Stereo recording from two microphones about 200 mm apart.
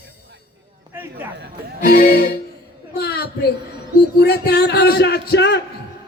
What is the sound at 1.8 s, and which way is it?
Music, 45° left (ahead or behind).